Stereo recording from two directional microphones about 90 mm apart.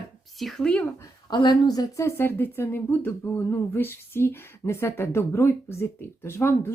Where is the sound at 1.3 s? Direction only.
55° left (ahead or behind).